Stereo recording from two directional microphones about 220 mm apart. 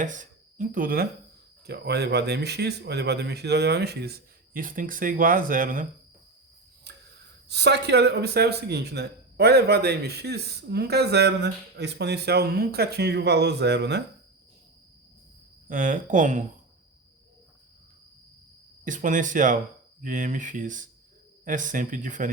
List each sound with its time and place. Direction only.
0.0 s a man's voice: 35° right (ahead or behind)
6.9 s cricket: 50° right (ahead or behind)
7.4 s a man's voice: 50° right (ahead or behind)
15.7 s speech: 35° right (ahead or behind)
18.9 s speech: 35° right (ahead or behind)